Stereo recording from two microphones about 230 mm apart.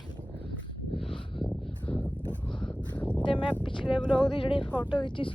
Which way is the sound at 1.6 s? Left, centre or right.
Centre.